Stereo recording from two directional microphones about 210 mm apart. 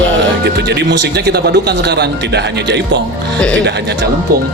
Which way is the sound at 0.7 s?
55° right (ahead or behind).